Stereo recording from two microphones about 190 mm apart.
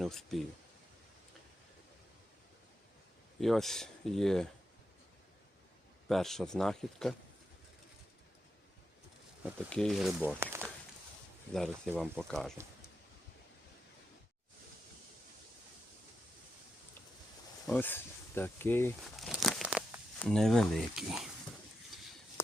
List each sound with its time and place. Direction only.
0.0 s speech: centre (ahead or behind)
3.4 s speech: centre (ahead or behind)
6.1 s speech: centre (ahead or behind)
9.6 s speech: 5° left (ahead or behind)
11.5 s speech: 5° left (ahead or behind)
17.7 s speech: 10° left (ahead or behind)
19.1 s crumpling: centre (ahead or behind)
20.1 s speech: 5° left (ahead or behind)